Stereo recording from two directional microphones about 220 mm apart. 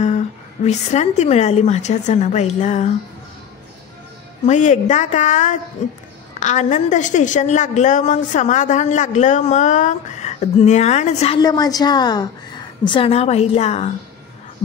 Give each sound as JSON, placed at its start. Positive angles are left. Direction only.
{"t": 0.7, "sound": "a woman's voice", "side_deg": 30}
{"t": 4.5, "sound": "a woman's voice", "side_deg": 30}